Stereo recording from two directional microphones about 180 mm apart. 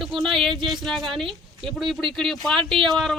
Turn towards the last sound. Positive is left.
turn(degrees=0)  # may be behind; listen again after turning